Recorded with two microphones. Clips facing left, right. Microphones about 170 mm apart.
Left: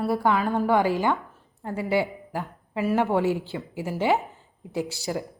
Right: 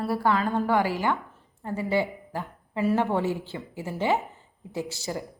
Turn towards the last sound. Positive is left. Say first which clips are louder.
# left 3 dB
turn(degrees=15)  # may be behind; listen again after turning